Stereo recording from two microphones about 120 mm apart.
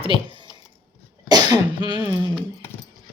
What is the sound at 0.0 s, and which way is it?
Speech, 45° right (ahead or behind).